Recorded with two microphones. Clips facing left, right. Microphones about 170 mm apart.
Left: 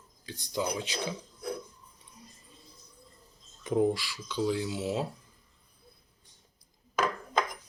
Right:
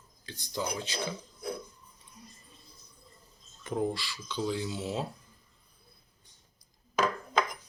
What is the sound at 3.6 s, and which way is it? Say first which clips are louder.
Speech: left 5 dB; 15° left (ahead or behind).